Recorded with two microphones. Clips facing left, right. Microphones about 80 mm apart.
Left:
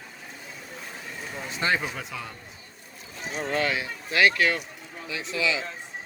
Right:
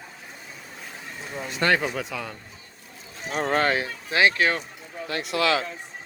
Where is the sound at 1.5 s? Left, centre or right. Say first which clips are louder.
Right 4 dB; right.